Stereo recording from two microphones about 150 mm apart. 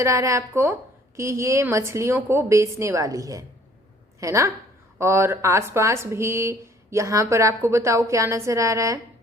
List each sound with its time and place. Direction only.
0.0 s speech: 20° right (ahead or behind)